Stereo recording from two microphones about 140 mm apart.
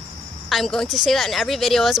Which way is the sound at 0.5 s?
Centre (ahead or behind).